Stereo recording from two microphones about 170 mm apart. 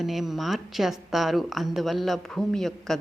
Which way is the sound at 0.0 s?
Centre (ahead or behind).